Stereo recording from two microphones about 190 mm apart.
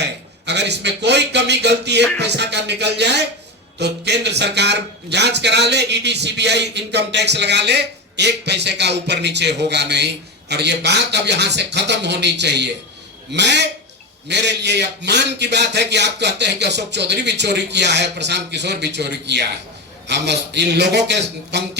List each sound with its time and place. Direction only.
0.0 s a man's voice: 65° right (ahead or behind)